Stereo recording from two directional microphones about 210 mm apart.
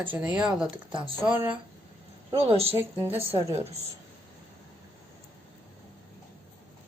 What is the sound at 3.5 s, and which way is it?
Speech, 30° right (ahead or behind).